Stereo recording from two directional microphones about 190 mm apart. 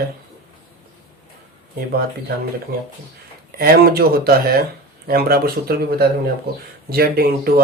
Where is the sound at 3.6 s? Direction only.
55° right (ahead or behind).